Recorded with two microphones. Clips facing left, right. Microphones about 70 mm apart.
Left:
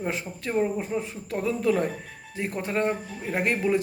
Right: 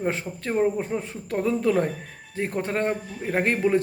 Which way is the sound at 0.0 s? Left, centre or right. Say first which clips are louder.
Right 3 dB; right.